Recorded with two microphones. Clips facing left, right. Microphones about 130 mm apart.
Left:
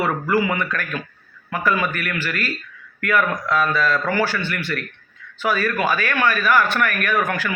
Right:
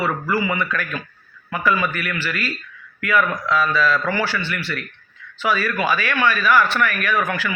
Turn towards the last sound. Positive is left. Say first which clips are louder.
# even
turn(degrees=45)  # may be behind; listen again after turning